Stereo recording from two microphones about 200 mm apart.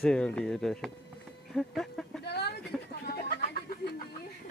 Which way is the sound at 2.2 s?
55° left (ahead or behind).